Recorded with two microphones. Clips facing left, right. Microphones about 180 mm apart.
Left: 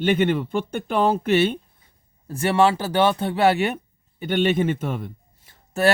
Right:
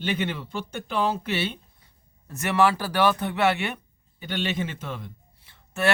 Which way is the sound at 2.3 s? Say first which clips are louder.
Left 4 dB; 30° left (ahead or behind).